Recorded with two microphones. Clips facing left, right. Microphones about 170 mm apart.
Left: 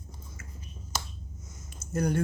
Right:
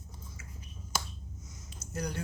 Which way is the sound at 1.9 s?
50° left (ahead or behind).